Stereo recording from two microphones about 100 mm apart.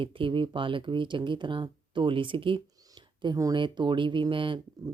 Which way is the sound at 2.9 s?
45° right (ahead or behind).